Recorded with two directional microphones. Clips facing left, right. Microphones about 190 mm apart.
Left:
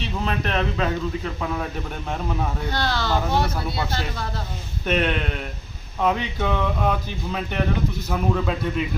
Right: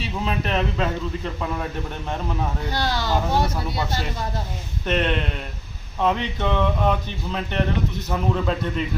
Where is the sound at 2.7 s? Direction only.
15° right (ahead or behind).